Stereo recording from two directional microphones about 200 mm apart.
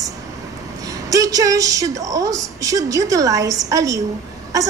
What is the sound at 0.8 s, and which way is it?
A woman's voice, 15° right (ahead or behind).